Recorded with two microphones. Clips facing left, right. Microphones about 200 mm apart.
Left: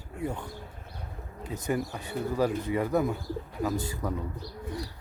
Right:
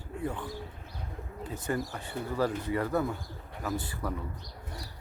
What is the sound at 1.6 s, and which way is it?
Speech, 20° left (ahead or behind).